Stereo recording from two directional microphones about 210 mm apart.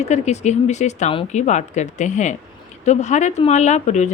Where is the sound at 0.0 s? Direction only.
30° left (ahead or behind).